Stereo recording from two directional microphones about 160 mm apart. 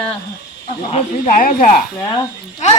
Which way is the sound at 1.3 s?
60° left (ahead or behind).